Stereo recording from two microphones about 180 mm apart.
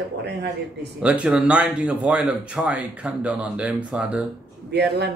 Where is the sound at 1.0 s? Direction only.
5° right (ahead or behind).